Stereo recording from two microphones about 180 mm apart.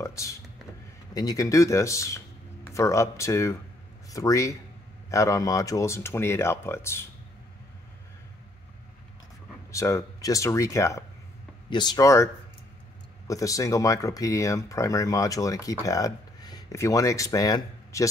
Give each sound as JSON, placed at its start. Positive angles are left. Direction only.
{"t": 0.0, "sound": "a sound", "side_deg": 15}
{"t": 1.1, "sound": "speech", "side_deg": 20}
{"t": 9.7, "sound": "speech", "side_deg": 15}
{"t": 13.3, "sound": "speech", "side_deg": 20}